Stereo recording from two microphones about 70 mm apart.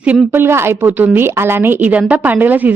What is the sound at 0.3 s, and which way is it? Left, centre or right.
A woman's voice, right.